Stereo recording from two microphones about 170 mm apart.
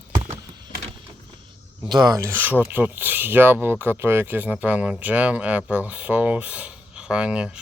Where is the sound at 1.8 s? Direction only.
25° right (ahead or behind).